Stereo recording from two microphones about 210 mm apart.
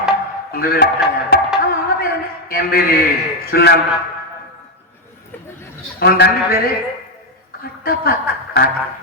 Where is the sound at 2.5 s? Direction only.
45° left (ahead or behind).